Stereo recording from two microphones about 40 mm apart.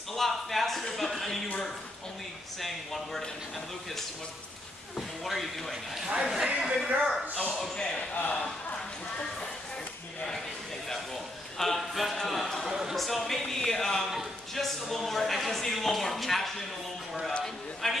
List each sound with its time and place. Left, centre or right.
0.1 s speech: centre
2.6 s speech: centre
5.2 s speech: centre
6.2 s speech: centre
7.7 s speech: centre
8.1 s speech: left
11.5 s a sound: centre
13.0 s speech: centre
13.6 s a sound: centre
17.8 s a sound: centre